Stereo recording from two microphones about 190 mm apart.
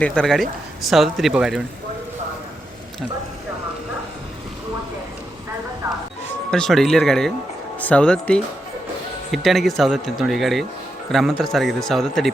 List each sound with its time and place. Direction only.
0.0 s speech: 5° left (ahead or behind)
6.5 s speech: centre (ahead or behind)